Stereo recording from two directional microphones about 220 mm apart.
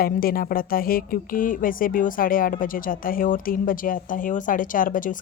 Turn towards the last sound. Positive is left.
turn(degrees=40)  # may be behind; listen again after turning